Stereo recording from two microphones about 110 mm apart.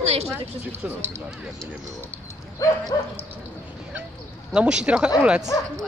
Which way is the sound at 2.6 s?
35° left (ahead or behind).